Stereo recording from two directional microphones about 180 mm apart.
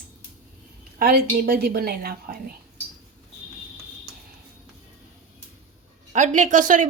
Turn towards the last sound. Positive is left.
turn(degrees=-45)  # may be behind; listen again after turning